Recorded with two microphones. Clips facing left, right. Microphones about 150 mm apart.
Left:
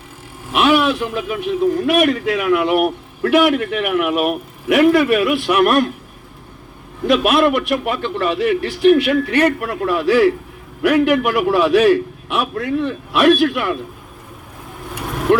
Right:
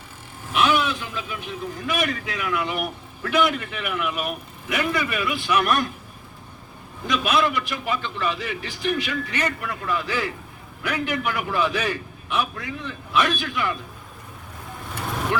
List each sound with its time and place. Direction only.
0.5 s a man's voice: 65° left (ahead or behind)
7.1 s a man's voice: 60° left (ahead or behind)
15.3 s speech: 60° left (ahead or behind)